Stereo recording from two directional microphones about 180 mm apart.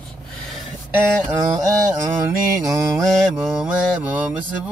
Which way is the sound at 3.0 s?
5° right (ahead or behind).